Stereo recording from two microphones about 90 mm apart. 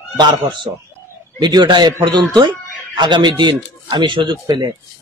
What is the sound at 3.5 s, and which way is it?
Speech, 70° right (ahead or behind).